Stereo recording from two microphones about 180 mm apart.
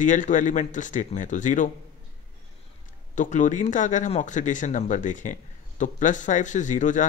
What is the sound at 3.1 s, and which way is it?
Speech, 45° left (ahead or behind).